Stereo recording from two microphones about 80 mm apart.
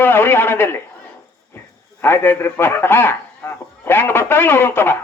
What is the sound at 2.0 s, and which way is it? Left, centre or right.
A man's voice, left.